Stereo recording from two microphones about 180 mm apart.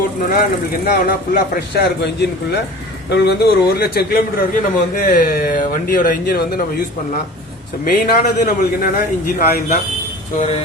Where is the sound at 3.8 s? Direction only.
60° left (ahead or behind).